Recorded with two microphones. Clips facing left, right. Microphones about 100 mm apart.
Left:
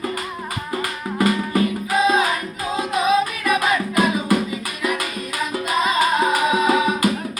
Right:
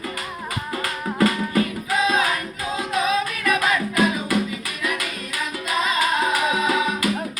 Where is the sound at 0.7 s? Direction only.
25° left (ahead or behind).